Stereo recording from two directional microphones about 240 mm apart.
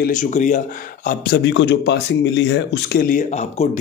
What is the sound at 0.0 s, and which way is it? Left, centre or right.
Speech, left.